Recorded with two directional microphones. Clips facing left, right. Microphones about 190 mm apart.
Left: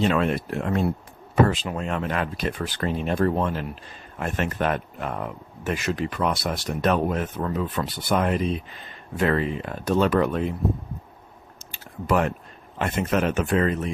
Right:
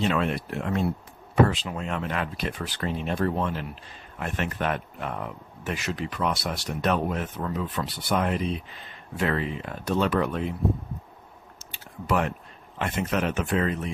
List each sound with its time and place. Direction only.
0.0 s speech: 45° left (ahead or behind)
11.7 s typing: 45° left (ahead or behind)
12.8 s speech: 45° left (ahead or behind)